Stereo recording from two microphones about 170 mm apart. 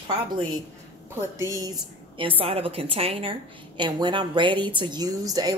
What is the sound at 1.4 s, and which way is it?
A woman's voice, 20° right (ahead or behind).